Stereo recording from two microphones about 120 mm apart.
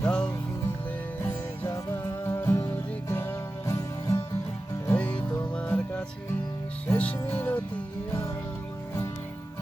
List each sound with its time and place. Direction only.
0.0 s music: 5° left (ahead or behind)
1.6 s music: 25° left (ahead or behind)
4.9 s music: 10° left (ahead or behind)